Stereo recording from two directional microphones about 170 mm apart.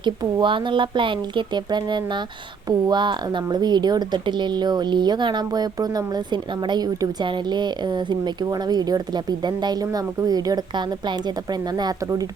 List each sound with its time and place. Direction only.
0.0 s a woman's voice: 30° right (ahead or behind)